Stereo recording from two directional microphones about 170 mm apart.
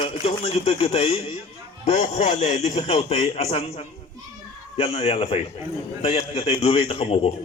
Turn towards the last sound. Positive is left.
turn(degrees=35)  # may be behind; listen again after turning